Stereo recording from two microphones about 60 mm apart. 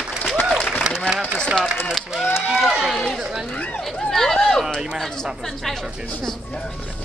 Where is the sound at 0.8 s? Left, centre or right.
Centre.